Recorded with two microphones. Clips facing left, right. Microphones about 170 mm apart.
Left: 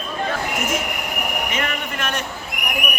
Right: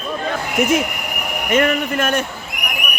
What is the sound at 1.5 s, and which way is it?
Speech, 50° right (ahead or behind).